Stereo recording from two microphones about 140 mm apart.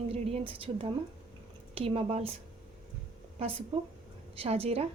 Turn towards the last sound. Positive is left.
turn(degrees=-45)  # may be behind; listen again after turning